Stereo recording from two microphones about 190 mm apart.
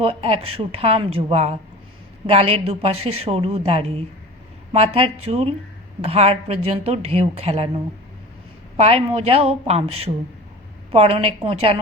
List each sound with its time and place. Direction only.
0.0 s a woman's voice: 30° right (ahead or behind)
8.7 s a woman's voice: 30° right (ahead or behind)